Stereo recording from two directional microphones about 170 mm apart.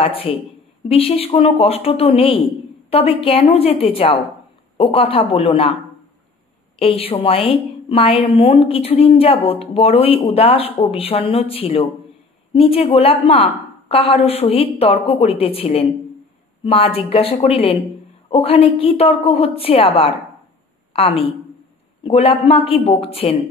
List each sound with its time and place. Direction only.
0.0 s a woman's voice: 35° left (ahead or behind)
6.8 s a woman's voice: 35° left (ahead or behind)